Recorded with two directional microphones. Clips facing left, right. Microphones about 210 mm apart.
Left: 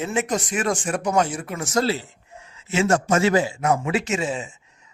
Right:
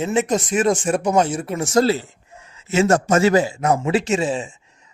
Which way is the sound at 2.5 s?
40° right (ahead or behind).